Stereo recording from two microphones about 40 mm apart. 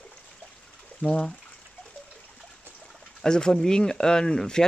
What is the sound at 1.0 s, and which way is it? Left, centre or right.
Speech, left.